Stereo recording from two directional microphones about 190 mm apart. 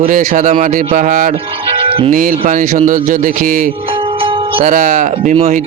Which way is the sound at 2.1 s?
45° right (ahead or behind).